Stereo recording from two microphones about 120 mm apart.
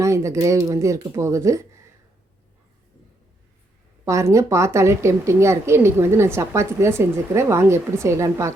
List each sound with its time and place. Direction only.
0.0 s a woman's voice: 25° right (ahead or behind)
4.0 s a woman's voice: 25° right (ahead or behind)